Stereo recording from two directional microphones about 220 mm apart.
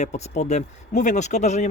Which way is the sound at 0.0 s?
30° left (ahead or behind).